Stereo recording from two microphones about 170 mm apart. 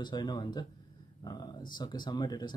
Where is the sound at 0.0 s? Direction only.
25° left (ahead or behind).